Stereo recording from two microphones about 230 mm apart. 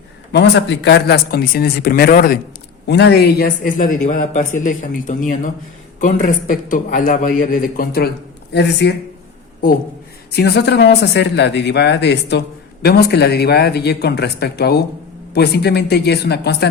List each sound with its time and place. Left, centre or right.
0.3 s a man's voice: left
10.3 s speech: left